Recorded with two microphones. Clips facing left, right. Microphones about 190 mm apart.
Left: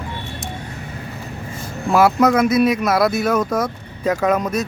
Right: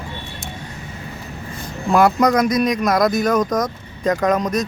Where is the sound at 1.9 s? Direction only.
5° left (ahead or behind).